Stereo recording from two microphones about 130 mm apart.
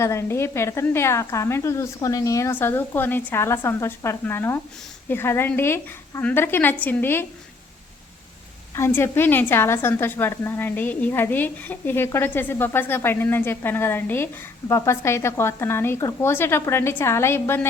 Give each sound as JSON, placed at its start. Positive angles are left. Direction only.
{"t": 0.0, "sound": "a woman's voice", "side_deg": 20}
{"t": 8.7, "sound": "a woman's voice", "side_deg": 20}